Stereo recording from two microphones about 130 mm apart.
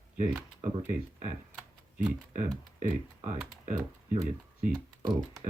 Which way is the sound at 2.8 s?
65° right (ahead or behind).